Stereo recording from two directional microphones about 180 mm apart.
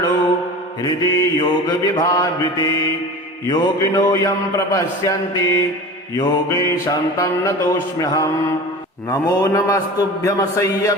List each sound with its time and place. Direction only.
0.8 s mantra: 20° left (ahead or behind)